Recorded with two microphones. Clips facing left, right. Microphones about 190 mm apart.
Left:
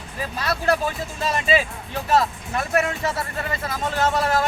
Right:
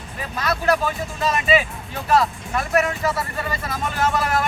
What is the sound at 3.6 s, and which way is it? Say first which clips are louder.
Speech: left 1 dB; 25° left (ahead or behind).